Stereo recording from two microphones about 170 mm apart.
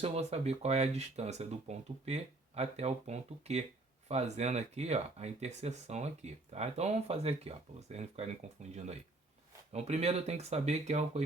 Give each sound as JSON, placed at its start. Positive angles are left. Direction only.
{"t": 0.0, "sound": "speech", "side_deg": -40}
{"t": 9.7, "sound": "speech", "side_deg": -40}